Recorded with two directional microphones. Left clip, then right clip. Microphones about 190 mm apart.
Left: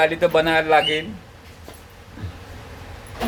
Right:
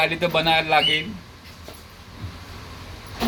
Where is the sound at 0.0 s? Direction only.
10° left (ahead or behind).